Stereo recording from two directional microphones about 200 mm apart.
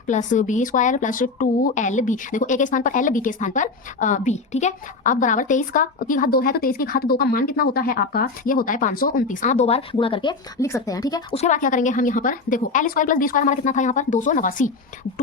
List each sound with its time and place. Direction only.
0.1 s speech: 40° left (ahead or behind); by 11.3 s 20° left (ahead or behind)
11.3 s speech: 35° left (ahead or behind)